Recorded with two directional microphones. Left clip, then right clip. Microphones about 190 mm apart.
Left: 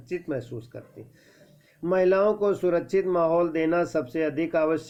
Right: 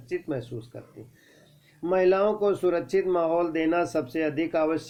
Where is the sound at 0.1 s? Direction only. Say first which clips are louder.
Even; 35° left (ahead or behind).